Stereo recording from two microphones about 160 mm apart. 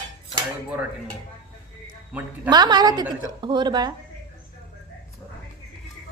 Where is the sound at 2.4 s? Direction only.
25° right (ahead or behind).